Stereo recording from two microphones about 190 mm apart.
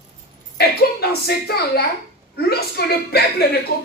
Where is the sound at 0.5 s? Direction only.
60° left (ahead or behind).